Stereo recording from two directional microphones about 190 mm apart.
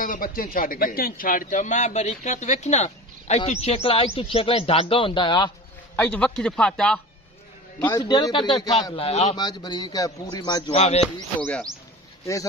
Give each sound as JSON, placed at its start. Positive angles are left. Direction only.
{"t": 0.0, "sound": "a man's voice", "side_deg": 45}
{"t": 5.9, "sound": "speech", "side_deg": 5}
{"t": 8.1, "sound": "a man's voice", "side_deg": 25}
{"t": 9.4, "sound": "a man's voice", "side_deg": 20}
{"t": 10.7, "sound": "a man's voice", "side_deg": 35}
{"t": 11.1, "sound": "speech", "side_deg": 10}